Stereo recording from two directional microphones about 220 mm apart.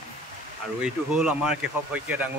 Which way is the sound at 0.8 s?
5° right (ahead or behind).